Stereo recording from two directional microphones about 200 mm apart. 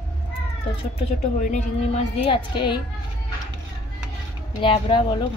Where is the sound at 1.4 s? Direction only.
40° left (ahead or behind).